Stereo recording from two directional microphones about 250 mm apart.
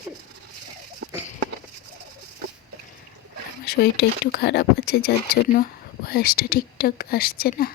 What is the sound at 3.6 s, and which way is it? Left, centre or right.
Speech, left.